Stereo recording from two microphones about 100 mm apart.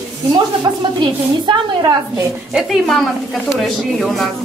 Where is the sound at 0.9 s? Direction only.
50° right (ahead or behind).